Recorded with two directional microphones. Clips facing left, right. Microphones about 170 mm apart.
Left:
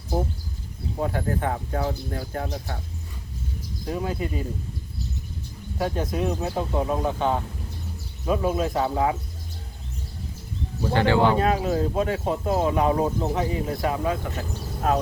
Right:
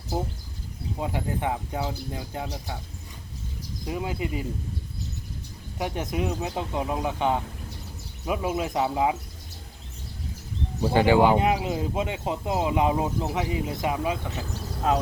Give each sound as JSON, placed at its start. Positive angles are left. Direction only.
{"t": 1.0, "sound": "speech", "side_deg": -15}
{"t": 3.9, "sound": "speech", "side_deg": -20}
{"t": 5.8, "sound": "speech", "side_deg": -20}
{"t": 10.8, "sound": "speech", "side_deg": -15}